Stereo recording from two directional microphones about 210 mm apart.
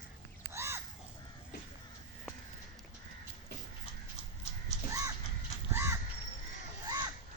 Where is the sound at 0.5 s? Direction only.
10° right (ahead or behind).